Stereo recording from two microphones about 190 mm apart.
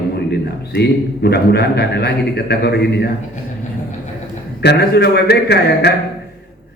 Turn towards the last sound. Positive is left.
turn(degrees=60)  # may be behind; listen again after turning